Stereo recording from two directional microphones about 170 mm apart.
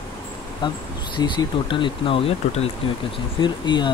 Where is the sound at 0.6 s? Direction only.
25° left (ahead or behind).